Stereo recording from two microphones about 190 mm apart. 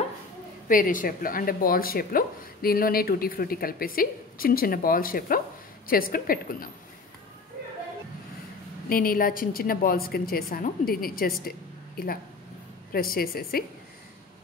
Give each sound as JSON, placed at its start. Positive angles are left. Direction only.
{"t": 0.7, "sound": "speech", "side_deg": 45}
{"t": 8.8, "sound": "speech", "side_deg": 50}
{"t": 12.9, "sound": "speech", "side_deg": 50}